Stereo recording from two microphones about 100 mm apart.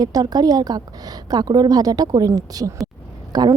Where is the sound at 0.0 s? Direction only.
40° right (ahead or behind).